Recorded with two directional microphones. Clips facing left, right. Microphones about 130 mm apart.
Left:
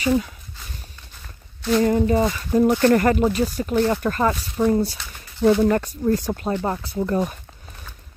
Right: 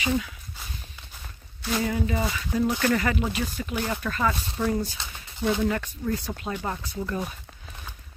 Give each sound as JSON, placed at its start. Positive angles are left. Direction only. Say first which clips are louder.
{"t": 1.8, "sound": "speech", "louder": "left 9 dB", "side_deg": 45}
{"t": 4.6, "sound": "speech", "louder": "left 9 dB", "side_deg": 25}
{"t": 5.4, "sound": "speech", "louder": "left 8 dB", "side_deg": 45}